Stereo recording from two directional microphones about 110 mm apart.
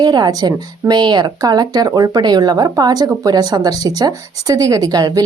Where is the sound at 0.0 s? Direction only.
40° right (ahead or behind).